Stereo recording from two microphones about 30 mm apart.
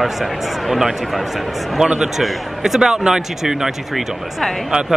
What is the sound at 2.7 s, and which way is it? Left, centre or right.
Speech, right.